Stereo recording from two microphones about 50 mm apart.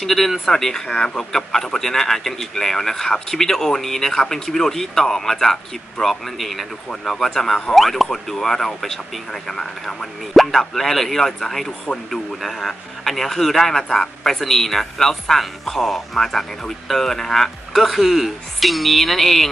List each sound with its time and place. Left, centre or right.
0.0 s speech: centre
0.8 s speech: centre
1.1 s speech: centre